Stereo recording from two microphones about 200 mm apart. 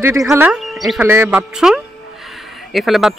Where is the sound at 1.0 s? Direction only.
10° right (ahead or behind).